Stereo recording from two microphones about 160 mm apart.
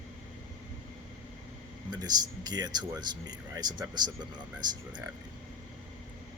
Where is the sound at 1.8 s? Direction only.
25° right (ahead or behind).